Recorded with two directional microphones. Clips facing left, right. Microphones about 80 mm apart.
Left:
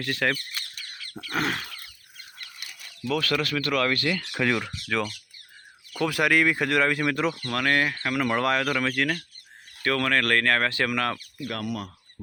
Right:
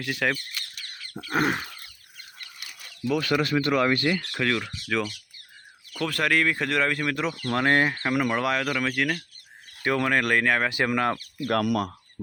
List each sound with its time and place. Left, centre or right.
0.0 s speech: centre
1.2 s speech: centre
3.1 s speech: centre
4.2 s speech: centre
7.5 s speech: right
8.3 s speech: centre
9.8 s speech: centre
11.6 s speech: right